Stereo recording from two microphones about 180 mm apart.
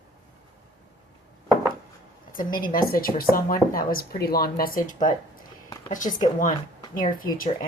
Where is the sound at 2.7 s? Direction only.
55° left (ahead or behind).